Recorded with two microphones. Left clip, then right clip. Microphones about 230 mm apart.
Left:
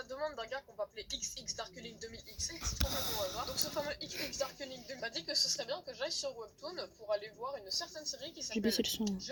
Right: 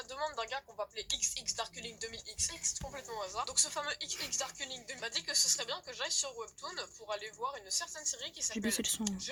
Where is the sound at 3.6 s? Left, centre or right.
Centre.